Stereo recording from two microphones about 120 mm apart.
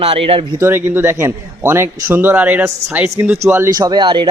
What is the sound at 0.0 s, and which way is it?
Speech, 50° right (ahead or behind).